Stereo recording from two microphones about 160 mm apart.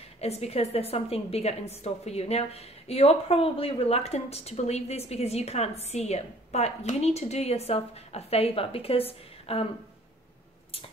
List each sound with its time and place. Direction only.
0.2 s a woman's voice: 40° left (ahead or behind)